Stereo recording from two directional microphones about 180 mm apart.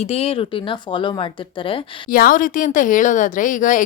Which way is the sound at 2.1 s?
50° left (ahead or behind).